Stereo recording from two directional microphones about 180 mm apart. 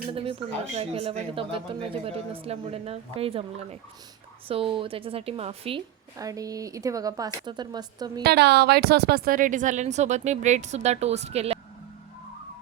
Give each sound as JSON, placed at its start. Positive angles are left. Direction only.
{"t": 0.1, "sound": "speech", "side_deg": -30}
{"t": 6.1, "sound": "speech", "side_deg": -20}
{"t": 8.2, "sound": "speech", "side_deg": -65}